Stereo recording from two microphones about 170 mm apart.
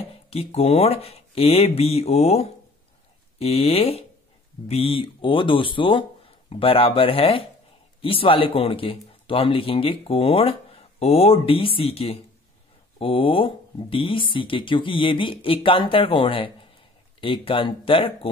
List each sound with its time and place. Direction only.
0.0 s speech: 35° left (ahead or behind)